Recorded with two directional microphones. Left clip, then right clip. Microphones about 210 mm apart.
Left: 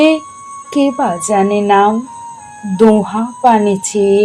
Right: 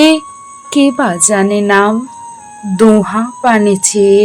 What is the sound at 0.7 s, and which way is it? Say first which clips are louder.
Speech: right 3 dB; 15° right (ahead or behind).